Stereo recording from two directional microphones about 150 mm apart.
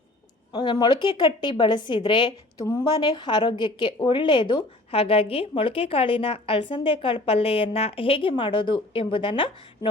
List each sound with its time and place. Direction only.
0.5 s a woman's voice: 35° left (ahead or behind)